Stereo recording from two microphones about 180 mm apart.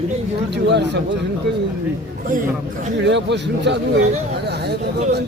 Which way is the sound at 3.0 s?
75° right (ahead or behind).